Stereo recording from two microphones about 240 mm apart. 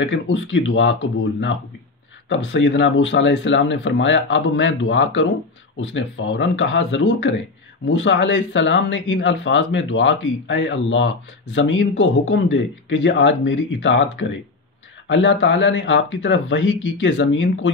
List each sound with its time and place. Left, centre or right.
0.0 s speech: left
2.2 s speech: left